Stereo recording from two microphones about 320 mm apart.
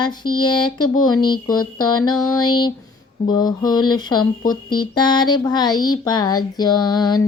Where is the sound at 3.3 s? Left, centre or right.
Centre.